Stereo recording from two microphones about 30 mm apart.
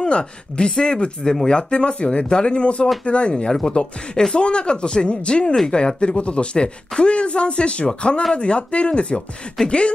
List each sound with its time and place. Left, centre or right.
0.0 s speech: left